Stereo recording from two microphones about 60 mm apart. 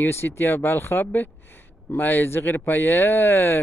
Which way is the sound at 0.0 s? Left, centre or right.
Left.